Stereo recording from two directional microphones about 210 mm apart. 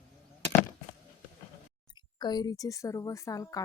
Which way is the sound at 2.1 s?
20° left (ahead or behind).